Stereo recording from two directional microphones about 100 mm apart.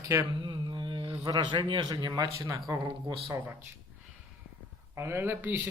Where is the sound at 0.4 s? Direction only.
45° right (ahead or behind).